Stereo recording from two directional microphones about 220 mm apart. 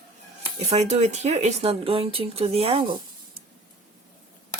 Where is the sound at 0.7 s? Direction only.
30° right (ahead or behind).